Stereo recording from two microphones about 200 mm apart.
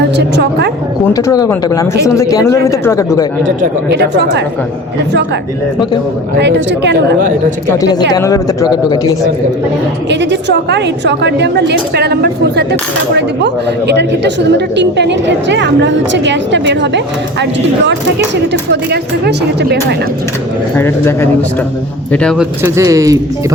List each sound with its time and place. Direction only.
0.2 s a woman's voice: 55° right (ahead or behind)
1.1 s speech: 15° left (ahead or behind)
3.8 s a woman's voice: 60° right (ahead or behind)
6.4 s a woman's voice: 60° right (ahead or behind)
7.8 s speech: 20° left (ahead or behind)
10.7 s a woman's voice: 60° right (ahead or behind)
18.7 s a woman's voice: 55° right (ahead or behind)
20.7 s speech: 10° left (ahead or behind)
22.6 s speech: 15° right (ahead or behind)